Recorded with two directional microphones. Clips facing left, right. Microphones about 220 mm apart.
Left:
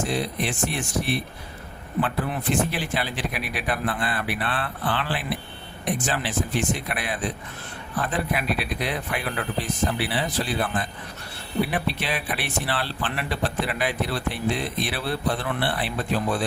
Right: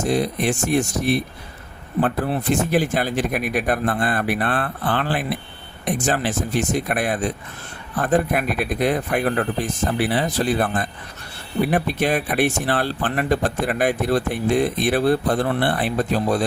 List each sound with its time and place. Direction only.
0.0 s speech: 45° right (ahead or behind)